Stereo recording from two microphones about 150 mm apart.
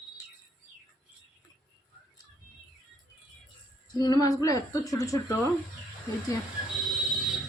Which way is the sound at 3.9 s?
25° left (ahead or behind).